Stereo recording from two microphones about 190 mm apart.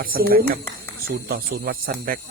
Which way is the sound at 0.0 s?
50° right (ahead or behind).